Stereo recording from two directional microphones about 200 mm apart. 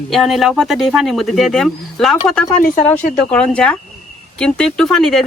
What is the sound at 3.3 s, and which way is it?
Speech, 5° left (ahead or behind).